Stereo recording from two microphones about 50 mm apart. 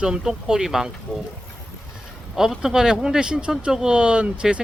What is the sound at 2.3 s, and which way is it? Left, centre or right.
Speech, centre.